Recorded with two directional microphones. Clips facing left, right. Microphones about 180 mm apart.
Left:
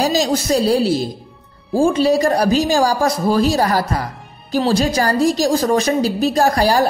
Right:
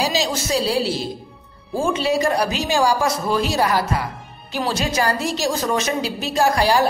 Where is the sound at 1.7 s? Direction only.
35° left (ahead or behind).